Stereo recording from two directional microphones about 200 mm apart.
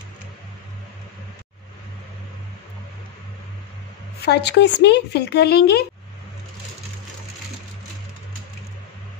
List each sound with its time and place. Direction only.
4.2 s speech: 55° left (ahead or behind)